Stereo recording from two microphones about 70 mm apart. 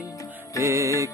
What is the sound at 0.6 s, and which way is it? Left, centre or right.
Music, right.